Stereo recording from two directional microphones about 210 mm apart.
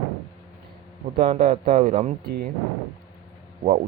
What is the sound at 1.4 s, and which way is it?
Speech, 45° right (ahead or behind).